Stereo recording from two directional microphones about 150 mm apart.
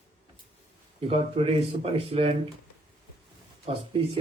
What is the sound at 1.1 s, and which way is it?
Speech, 40° right (ahead or behind).